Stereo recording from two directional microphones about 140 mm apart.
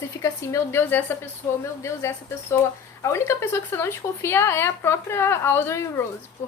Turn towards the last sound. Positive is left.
turn(degrees=20)  # may be behind; listen again after turning